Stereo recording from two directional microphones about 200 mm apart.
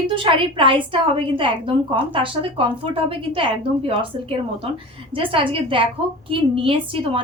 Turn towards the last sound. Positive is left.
turn(degrees=-25)  # may be behind; listen again after turning